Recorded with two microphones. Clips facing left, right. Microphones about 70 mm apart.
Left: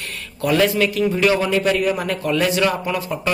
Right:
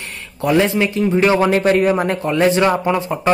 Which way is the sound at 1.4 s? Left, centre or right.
Right.